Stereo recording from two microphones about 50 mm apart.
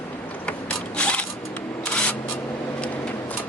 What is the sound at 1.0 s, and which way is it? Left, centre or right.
Mechanisms, centre.